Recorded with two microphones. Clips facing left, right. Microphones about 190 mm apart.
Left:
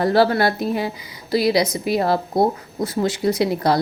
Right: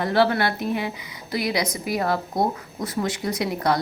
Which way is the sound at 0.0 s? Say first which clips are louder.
Left 4 dB; 35° left (ahead or behind).